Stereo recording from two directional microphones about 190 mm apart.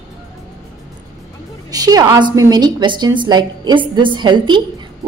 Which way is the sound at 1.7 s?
20° right (ahead or behind).